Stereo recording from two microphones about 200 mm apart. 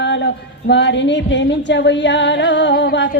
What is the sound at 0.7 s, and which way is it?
Female singing, 65° left (ahead or behind).